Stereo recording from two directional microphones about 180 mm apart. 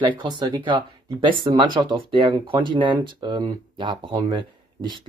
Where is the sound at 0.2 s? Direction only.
25° right (ahead or behind).